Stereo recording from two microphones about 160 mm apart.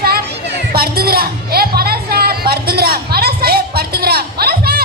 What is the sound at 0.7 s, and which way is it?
Music, 70° right (ahead or behind).